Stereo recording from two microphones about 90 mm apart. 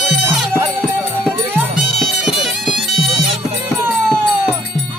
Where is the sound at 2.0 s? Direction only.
Centre (ahead or behind).